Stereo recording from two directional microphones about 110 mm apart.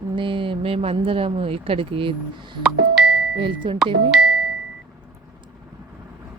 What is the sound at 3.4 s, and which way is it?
Speech, 50° right (ahead or behind).